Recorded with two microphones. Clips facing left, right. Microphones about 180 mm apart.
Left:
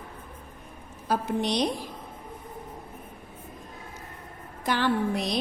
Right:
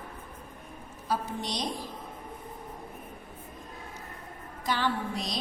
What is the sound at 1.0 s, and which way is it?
Speech, 65° left (ahead or behind).